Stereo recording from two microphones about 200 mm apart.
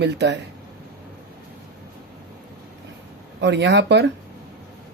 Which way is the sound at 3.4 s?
60° right (ahead or behind).